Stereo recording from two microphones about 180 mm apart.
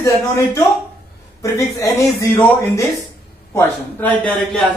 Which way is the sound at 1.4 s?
20° left (ahead or behind).